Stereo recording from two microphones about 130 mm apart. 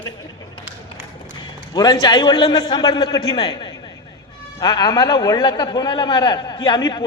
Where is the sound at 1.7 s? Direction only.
30° left (ahead or behind).